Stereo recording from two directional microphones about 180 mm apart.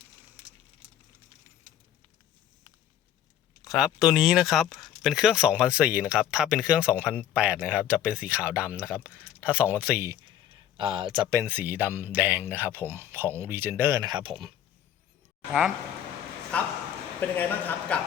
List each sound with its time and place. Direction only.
0.8 s a sound: 35° right (ahead or behind)
3.6 s speech: centre (ahead or behind)
10.8 s speech: 25° right (ahead or behind)
16.5 s a man's voice: 5° left (ahead or behind)